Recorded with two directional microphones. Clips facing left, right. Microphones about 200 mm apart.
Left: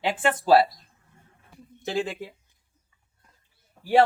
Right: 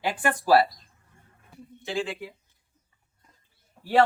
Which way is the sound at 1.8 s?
40° left (ahead or behind).